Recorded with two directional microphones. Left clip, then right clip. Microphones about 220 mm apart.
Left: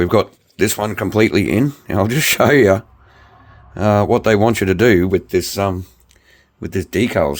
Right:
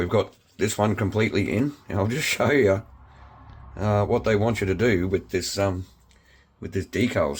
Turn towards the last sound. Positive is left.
turn(degrees=45)  # may be behind; listen again after turning